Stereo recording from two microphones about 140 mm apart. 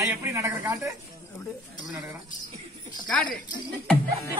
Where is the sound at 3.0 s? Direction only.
5° left (ahead or behind).